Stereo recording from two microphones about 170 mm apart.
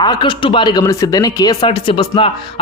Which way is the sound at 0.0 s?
25° left (ahead or behind).